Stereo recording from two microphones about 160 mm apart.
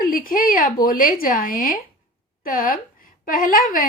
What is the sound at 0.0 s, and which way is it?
A woman's voice, 60° left (ahead or behind).